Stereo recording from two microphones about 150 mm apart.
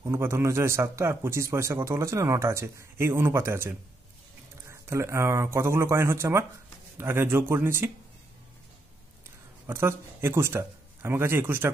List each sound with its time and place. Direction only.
0.0 s speech: 15° right (ahead or behind)
9.7 s speech: 15° right (ahead or behind)